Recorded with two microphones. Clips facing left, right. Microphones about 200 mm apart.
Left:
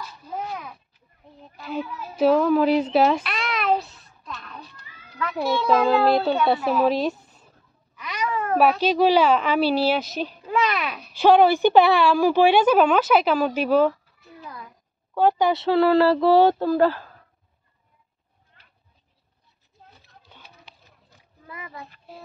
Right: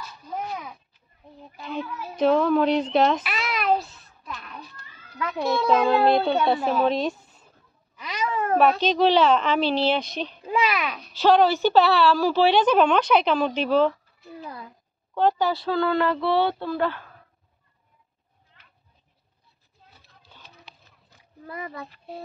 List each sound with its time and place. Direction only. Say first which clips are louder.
1.6 s speech: left 2 dB; 5° left (ahead or behind)
3.3 s a sound: even; 5° right (ahead or behind)
5.3 s a woman's voice: left 1 dB; 5° left (ahead or behind)
8.0 s cat: even; 25° right (ahead or behind)
8.5 s a woman's voice: left 1 dB; 10° left (ahead or behind)
10.4 s a sound: even; 15° right (ahead or behind)
10.7 s speech: even; centre (ahead or behind)
11.1 s a woman's voice: left 3 dB; 15° left (ahead or behind)
14.4 s a sound: right 1 dB; 30° right (ahead or behind)
15.1 s speech: left 2 dB; 10° left (ahead or behind); by 17.1 s 35° left (ahead or behind)
21.5 s speech: right 4 dB; 40° right (ahead or behind)